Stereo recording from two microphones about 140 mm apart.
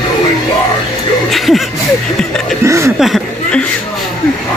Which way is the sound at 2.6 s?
20° right (ahead or behind).